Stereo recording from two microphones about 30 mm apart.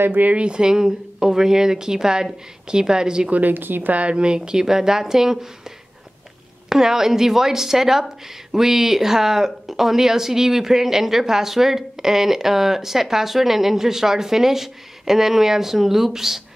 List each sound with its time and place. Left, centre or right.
0.5 s a woman's voice: right
3.3 s a woman's voice: right
4.1 s a woman's voice: right
4.4 s speech: right
6.7 s speech: centre